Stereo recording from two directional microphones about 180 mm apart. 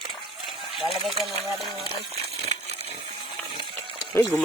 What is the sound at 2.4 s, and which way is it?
Coin, 35° right (ahead or behind).